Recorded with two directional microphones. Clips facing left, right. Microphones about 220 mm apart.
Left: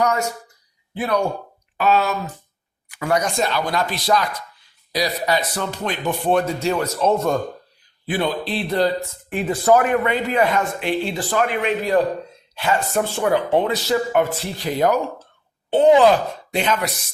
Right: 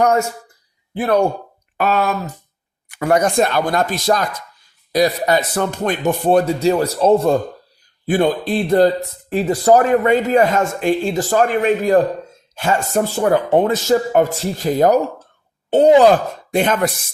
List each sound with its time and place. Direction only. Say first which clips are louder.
0.9 s speech: right 5 dB; 50° right (ahead or behind); by 7.3 s 30° right (ahead or behind)
8.0 s speech: right 6 dB; 45° right (ahead or behind)